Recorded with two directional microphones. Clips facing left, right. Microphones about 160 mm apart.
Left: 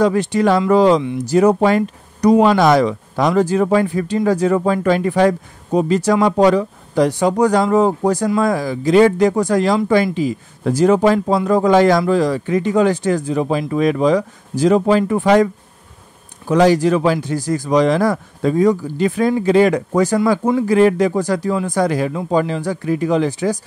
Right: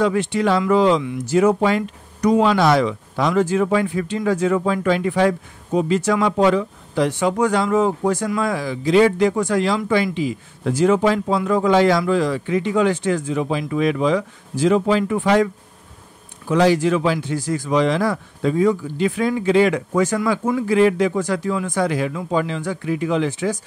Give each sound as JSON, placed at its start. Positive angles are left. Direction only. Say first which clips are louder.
{"t": 0.0, "sound": "speech", "louder": "left 4 dB", "side_deg": 40}